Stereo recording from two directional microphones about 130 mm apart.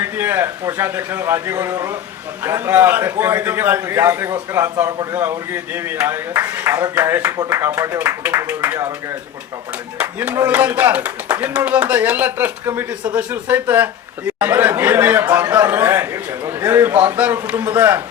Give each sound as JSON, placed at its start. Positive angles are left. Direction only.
{"t": 0.0, "sound": "a man's voice", "side_deg": -15}
{"t": 10.0, "sound": "speech", "side_deg": -10}